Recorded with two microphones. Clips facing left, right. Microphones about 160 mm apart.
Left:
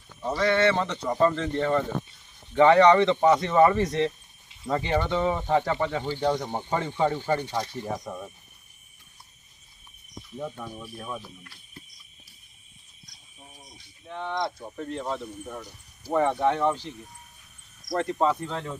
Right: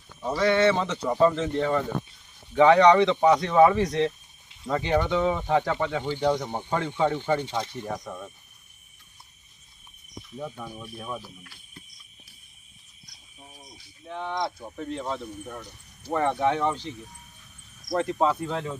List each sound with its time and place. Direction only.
0.3 s speech: centre (ahead or behind)
6.4 s speech: 15° left (ahead or behind)
6.7 s speech: 5° left (ahead or behind)
10.3 s speech: centre (ahead or behind)
14.1 s speech: centre (ahead or behind)
17.9 s speech: centre (ahead or behind)